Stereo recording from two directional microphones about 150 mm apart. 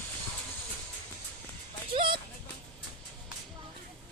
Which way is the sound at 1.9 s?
35° right (ahead or behind).